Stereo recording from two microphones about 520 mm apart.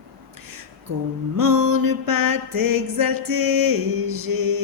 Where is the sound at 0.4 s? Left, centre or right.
Right.